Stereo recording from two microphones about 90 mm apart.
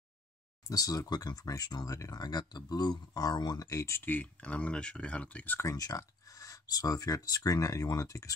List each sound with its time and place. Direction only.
0.7 s speech: 40° left (ahead or behind)
4.0 s speech: 15° left (ahead or behind)
5.6 s speech: 40° left (ahead or behind)